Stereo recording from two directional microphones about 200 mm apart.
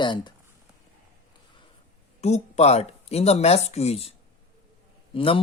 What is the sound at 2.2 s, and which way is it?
Speech, 35° left (ahead or behind).